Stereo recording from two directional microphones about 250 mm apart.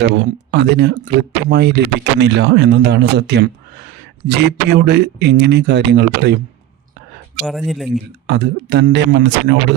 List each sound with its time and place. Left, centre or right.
0.0 s speech: right
7.4 s speech: centre
8.3 s speech: right